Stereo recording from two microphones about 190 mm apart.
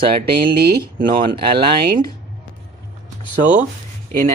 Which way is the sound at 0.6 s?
50° right (ahead or behind).